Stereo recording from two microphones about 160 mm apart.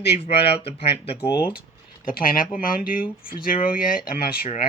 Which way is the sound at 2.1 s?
60° left (ahead or behind).